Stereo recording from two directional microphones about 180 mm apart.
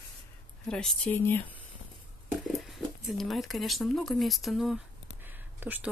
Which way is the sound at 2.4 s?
Centre (ahead or behind).